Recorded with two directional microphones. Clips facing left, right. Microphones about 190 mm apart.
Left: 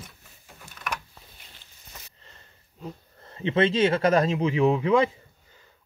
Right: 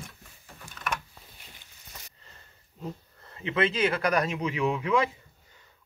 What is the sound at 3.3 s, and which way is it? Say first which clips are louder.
Speech: left 5 dB; 30° left (ahead or behind).